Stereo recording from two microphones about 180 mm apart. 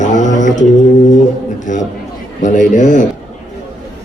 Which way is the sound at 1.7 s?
45° left (ahead or behind).